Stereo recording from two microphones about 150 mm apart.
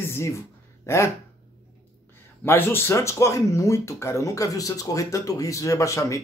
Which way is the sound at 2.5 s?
15° left (ahead or behind).